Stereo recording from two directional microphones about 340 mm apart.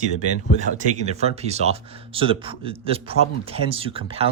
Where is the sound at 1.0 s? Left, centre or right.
Centre.